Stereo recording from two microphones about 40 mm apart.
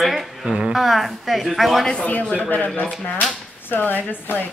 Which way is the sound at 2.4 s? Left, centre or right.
Left.